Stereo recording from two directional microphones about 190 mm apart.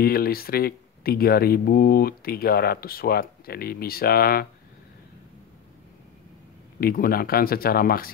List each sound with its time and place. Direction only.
0.0 s speech: 55° left (ahead or behind)
6.8 s speech: 50° left (ahead or behind)